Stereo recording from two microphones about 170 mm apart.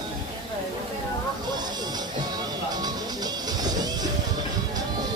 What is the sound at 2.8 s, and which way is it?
Music, 25° right (ahead or behind).